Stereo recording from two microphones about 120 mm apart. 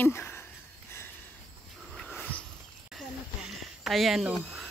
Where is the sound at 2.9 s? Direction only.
Centre (ahead or behind).